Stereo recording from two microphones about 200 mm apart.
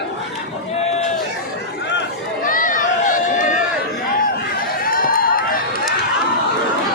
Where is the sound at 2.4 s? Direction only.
40° left (ahead or behind).